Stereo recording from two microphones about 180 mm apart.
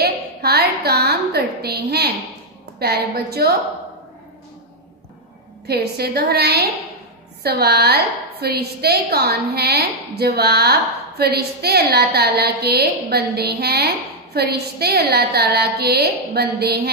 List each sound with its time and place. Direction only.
0.0 s a woman's voice: 60° right (ahead or behind)
5.7 s a woman's voice: 60° right (ahead or behind)